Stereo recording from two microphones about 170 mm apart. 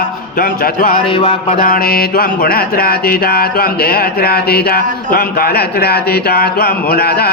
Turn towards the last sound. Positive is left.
turn(degrees=70)  # may be behind; listen again after turning